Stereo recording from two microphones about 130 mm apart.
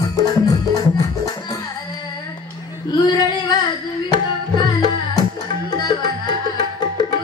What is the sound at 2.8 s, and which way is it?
Female singing, 30° left (ahead or behind).